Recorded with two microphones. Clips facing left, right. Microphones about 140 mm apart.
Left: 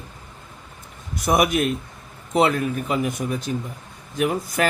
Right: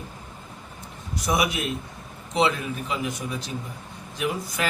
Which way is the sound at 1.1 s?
55° left (ahead or behind).